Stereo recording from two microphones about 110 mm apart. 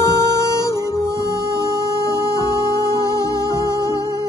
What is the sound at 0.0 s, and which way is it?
Music, 25° left (ahead or behind).